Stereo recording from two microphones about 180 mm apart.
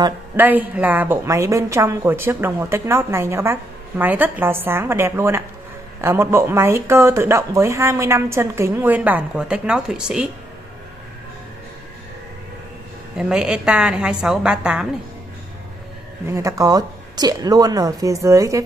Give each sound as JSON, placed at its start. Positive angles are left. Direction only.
{"t": 0.4, "sound": "speech", "side_deg": -10}
{"t": 13.2, "sound": "a woman's voice", "side_deg": -5}
{"t": 16.3, "sound": "a woman's voice", "side_deg": -20}